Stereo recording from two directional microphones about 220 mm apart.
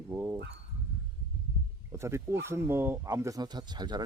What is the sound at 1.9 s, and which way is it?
Speech, 10° right (ahead or behind).